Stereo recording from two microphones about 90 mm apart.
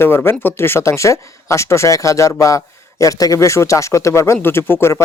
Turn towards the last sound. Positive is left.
turn(degrees=25)  # may be behind; listen again after turning